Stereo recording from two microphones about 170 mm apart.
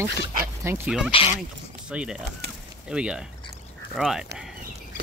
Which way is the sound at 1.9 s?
5° right (ahead or behind).